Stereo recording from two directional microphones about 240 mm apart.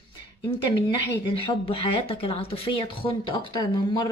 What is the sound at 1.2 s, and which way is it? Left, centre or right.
Speech, left.